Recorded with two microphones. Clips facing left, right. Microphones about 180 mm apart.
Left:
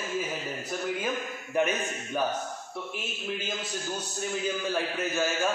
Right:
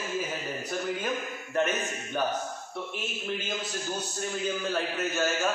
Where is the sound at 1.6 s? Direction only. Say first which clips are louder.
Left 1 dB; 10° left (ahead or behind).